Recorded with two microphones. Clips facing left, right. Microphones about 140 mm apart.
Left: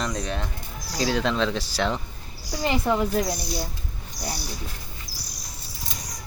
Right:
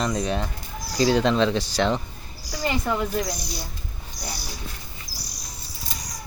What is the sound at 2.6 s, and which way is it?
Speech, 25° left (ahead or behind).